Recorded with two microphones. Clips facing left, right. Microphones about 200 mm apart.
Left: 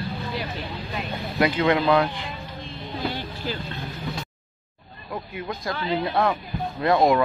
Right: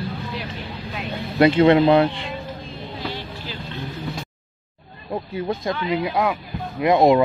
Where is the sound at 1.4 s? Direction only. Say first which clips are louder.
Right 7 dB; 30° right (ahead or behind).